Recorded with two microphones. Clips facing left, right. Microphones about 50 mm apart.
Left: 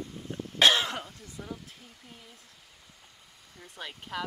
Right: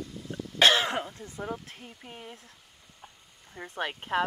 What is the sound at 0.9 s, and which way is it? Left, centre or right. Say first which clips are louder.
Speech: right 5 dB; right.